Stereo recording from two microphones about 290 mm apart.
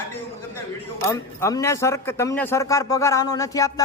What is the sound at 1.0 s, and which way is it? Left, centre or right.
Speech, centre.